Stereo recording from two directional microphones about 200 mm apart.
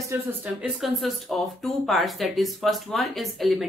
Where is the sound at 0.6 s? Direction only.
Centre (ahead or behind).